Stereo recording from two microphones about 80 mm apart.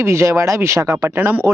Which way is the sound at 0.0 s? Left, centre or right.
Right.